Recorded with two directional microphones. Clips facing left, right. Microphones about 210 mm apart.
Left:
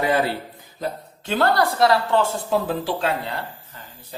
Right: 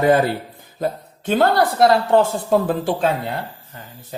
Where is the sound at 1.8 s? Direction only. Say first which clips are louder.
Right 5 dB; 50° right (ahead or behind).